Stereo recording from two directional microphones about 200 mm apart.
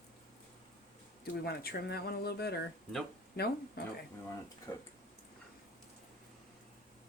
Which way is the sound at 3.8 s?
50° left (ahead or behind).